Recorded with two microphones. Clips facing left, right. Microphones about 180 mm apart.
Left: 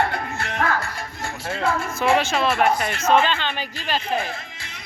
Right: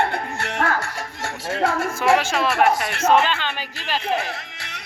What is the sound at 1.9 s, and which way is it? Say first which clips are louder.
Speech: even; 10° right (ahead or behind).